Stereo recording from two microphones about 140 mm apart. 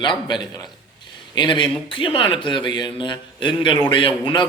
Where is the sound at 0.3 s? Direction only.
30° left (ahead or behind).